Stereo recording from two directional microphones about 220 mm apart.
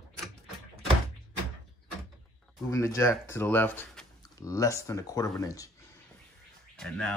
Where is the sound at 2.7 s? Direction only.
15° left (ahead or behind).